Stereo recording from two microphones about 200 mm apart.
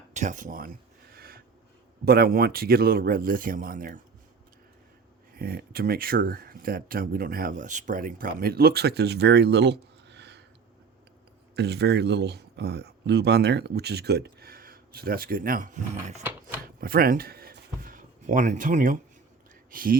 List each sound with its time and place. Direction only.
0.1 s speech: 35° right (ahead or behind)
1.1 s a sound: 50° right (ahead or behind)
2.0 s speech: 50° right (ahead or behind)
5.3 s speech: 45° right (ahead or behind)
11.5 s speech: 55° right (ahead or behind); by 16.2 s 35° right (ahead or behind)
16.8 s speech: 45° right (ahead or behind)